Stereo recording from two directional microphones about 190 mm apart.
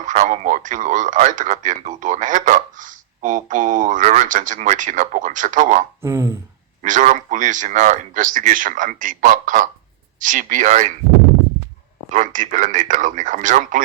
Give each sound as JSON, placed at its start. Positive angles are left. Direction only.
{"t": 0.0, "sound": "speech", "side_deg": -40}
{"t": 6.0, "sound": "a sound", "side_deg": -15}
{"t": 6.8, "sound": "a man's voice", "side_deg": -40}
{"t": 12.1, "sound": "a man's voice", "side_deg": -40}